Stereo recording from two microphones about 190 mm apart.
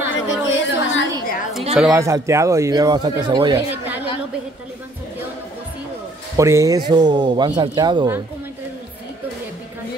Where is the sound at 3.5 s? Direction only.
10° right (ahead or behind).